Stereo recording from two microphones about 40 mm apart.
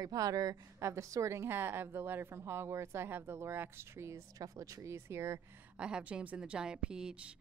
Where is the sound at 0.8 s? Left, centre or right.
Right.